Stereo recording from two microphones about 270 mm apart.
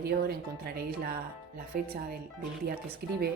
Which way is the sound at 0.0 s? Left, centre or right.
Right.